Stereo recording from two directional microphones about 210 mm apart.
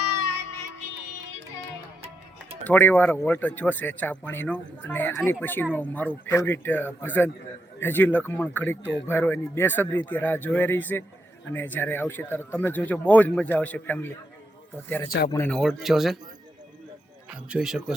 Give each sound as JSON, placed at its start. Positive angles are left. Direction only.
{"t": 2.6, "sound": "a man's voice", "side_deg": 10}
{"t": 17.2, "sound": "speech", "side_deg": -5}